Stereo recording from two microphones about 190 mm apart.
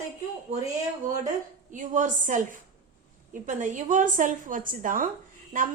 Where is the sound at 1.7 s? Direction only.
40° right (ahead or behind).